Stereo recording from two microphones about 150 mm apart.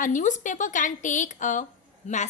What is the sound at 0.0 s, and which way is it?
A woman's voice, 55° left (ahead or behind).